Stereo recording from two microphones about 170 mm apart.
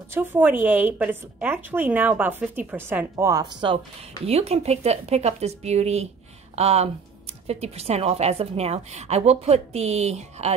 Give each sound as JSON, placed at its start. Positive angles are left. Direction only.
{"t": 0.1, "sound": "a woman's voice", "side_deg": -10}